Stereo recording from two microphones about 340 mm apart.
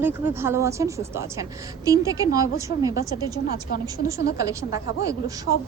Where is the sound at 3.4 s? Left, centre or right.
Left.